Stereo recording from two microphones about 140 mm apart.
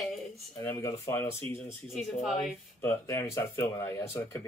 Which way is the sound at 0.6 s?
20° left (ahead or behind).